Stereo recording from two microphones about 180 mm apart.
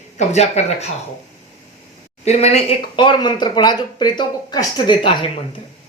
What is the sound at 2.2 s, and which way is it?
Speech, 35° left (ahead or behind).